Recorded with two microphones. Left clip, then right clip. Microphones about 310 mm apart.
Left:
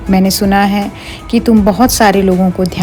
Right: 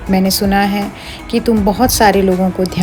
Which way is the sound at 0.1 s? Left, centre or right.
Left.